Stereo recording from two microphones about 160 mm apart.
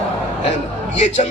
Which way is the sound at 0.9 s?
45° left (ahead or behind).